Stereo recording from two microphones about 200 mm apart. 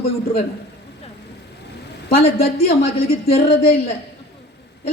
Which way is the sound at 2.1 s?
30° left (ahead or behind).